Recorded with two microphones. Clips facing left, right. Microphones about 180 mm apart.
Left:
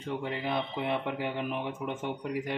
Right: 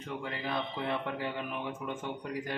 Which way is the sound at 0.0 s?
20° left (ahead or behind).